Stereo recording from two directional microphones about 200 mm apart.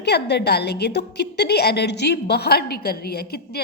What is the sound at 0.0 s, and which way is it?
A woman's voice, 55° left (ahead or behind).